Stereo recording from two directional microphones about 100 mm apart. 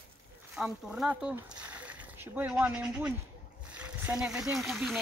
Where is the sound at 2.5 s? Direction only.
10° right (ahead or behind).